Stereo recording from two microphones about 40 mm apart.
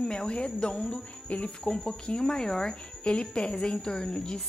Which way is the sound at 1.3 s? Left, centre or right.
Left.